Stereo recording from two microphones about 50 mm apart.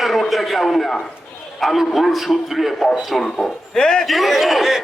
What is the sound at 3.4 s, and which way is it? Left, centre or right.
Speech, centre.